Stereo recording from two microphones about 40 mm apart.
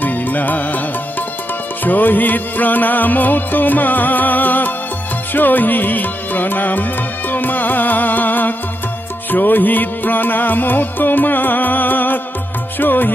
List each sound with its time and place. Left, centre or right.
0.0 s music: left
1.9 s music: left